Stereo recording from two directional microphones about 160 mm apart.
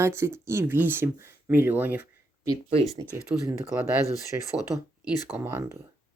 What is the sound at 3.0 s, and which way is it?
Speech, 20° left (ahead or behind).